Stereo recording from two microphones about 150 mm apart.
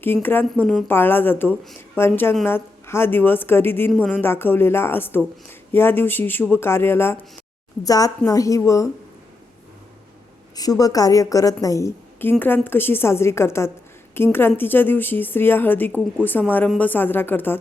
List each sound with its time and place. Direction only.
0.0 s a woman's voice: 15° left (ahead or behind)
10.5 s a woman's voice: 25° left (ahead or behind)